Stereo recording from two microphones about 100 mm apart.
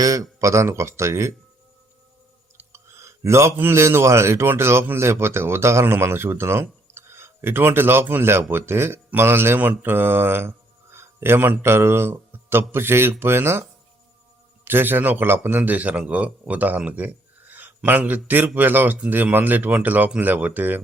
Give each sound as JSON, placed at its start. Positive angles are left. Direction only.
{"t": 0.0, "sound": "a man's voice", "side_deg": -35}
{"t": 2.6, "sound": "a man's voice", "side_deg": -25}